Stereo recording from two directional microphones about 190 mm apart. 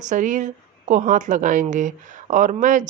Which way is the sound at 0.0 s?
40° right (ahead or behind).